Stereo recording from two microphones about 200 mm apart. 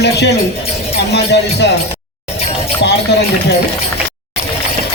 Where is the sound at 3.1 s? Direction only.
55° left (ahead or behind).